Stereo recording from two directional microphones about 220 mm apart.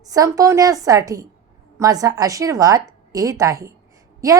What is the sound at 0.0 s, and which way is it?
A woman's voice, 15° right (ahead or behind).